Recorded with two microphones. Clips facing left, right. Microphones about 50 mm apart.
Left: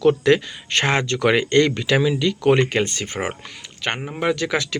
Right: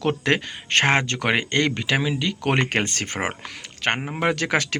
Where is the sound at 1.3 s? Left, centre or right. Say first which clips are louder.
Left 4 dB; right.